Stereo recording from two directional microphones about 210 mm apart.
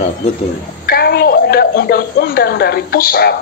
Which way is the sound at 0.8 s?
50° left (ahead or behind).